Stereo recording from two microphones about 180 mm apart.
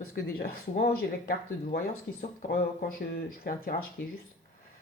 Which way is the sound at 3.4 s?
55° left (ahead or behind).